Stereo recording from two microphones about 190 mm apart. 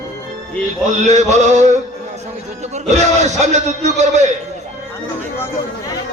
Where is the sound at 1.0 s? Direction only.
35° right (ahead or behind).